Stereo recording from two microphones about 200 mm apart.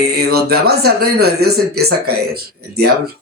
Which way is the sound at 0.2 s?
50° right (ahead or behind).